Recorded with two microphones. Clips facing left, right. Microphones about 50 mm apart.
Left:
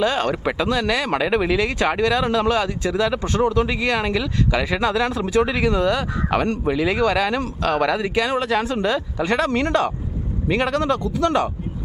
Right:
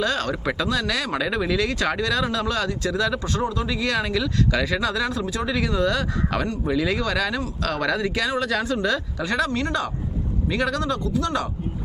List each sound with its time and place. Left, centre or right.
0.0 s speech: left
7.9 s speech: left
9.5 s speech: left
10.5 s speech: left